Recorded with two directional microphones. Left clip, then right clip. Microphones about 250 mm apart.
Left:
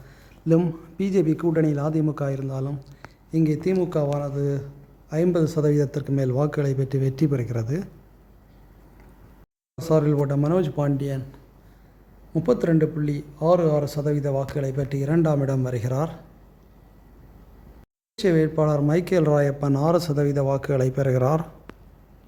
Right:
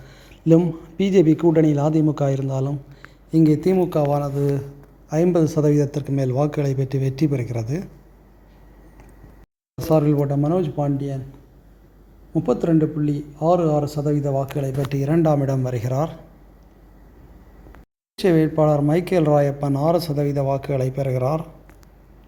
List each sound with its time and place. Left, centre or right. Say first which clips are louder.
0.0 s a man's voice: right 7 dB; centre
3.8 s a man's voice: right 4 dB; centre
9.7 s speech: right 3 dB; centre
12.3 s a man's voice: right 2 dB; centre
18.2 s speech: right 3 dB; centre; by 21.4 s left